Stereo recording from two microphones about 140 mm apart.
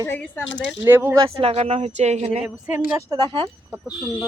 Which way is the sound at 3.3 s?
35° right (ahead or behind).